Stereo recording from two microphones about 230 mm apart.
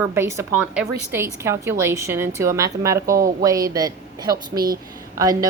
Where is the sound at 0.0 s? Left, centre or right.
Centre.